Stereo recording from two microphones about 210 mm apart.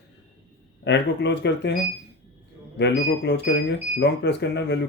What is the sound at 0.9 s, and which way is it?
Speech, 55° left (ahead or behind).